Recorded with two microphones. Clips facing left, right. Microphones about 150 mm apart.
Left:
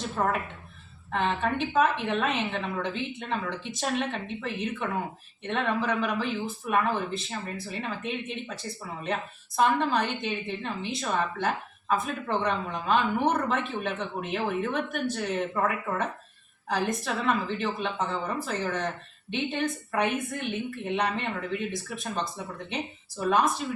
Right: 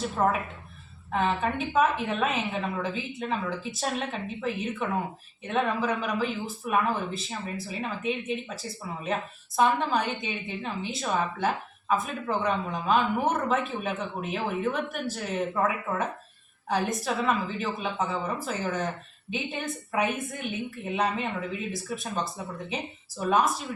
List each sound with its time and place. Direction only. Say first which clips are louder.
0.2 s a woman's voice: right 2 dB; 5° right (ahead or behind)